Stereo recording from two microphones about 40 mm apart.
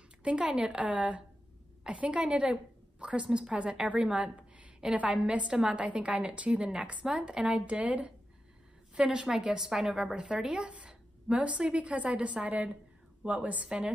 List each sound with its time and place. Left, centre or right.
0.2 s a woman's voice: right
4.0 s a sound: right
4.9 s a woman's voice: right
9.3 s a woman's voice: centre
10.1 s a woman's voice: centre; by 13.7 s right
13.7 s a woman's voice: right